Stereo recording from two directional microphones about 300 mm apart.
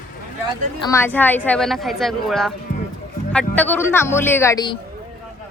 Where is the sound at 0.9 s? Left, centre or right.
Centre.